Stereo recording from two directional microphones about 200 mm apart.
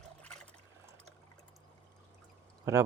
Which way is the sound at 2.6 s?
15° right (ahead or behind).